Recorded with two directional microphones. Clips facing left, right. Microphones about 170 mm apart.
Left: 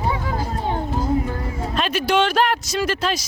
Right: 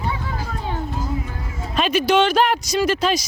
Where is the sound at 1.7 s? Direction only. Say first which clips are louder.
Right 4 dB; 5° right (ahead or behind).